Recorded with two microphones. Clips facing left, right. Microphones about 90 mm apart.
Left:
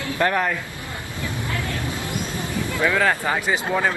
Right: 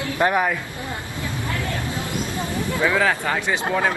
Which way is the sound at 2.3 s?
15° right (ahead or behind).